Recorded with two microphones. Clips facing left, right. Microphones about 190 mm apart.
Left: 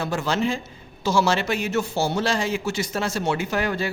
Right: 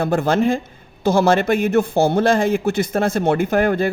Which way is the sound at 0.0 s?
55° right (ahead or behind).